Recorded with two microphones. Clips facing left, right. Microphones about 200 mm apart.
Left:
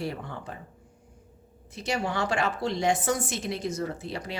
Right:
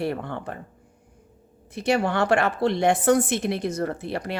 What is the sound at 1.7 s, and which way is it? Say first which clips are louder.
A woman's voice: right 7 dB; 60° right (ahead or behind).